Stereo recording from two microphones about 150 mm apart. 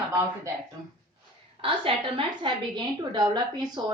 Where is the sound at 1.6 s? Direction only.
35° right (ahead or behind).